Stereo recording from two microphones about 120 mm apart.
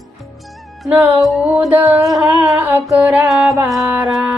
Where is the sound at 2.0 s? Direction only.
Centre (ahead or behind).